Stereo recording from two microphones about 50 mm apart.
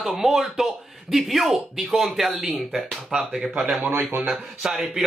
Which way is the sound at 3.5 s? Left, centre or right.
Right.